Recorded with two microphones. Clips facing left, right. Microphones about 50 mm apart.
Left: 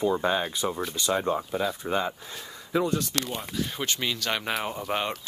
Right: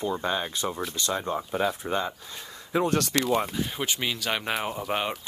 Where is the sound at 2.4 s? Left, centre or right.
Centre.